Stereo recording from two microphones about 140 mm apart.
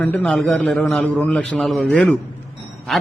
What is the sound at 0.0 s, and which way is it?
A man's voice, 10° left (ahead or behind).